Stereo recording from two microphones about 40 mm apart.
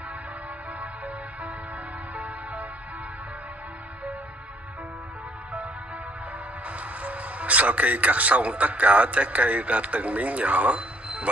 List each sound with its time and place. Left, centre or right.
0.7 s music: right
6.7 s speech: right